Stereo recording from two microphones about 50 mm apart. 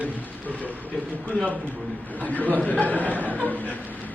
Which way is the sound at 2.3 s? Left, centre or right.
Left.